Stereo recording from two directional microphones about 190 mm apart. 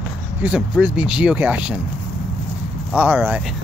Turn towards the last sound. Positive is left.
turn(degrees=-10)  # may be behind; listen again after turning